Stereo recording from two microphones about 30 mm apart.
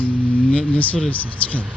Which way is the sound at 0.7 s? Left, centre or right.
Left.